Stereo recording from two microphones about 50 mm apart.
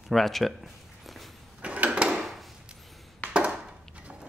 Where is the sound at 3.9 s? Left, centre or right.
Right.